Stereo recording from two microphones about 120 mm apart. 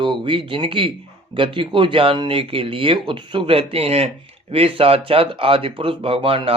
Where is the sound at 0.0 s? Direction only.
45° right (ahead or behind).